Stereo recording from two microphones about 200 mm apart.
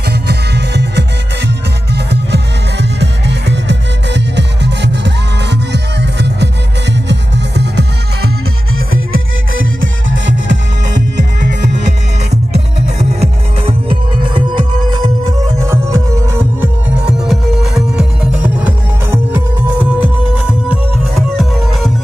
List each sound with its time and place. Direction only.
0.1 s music: 55° right (ahead or behind)
8.7 s music: 90° right; by 10.6 s 70° right (ahead or behind)
13.2 s music: 30° right (ahead or behind)
17.3 s music: centre (ahead or behind)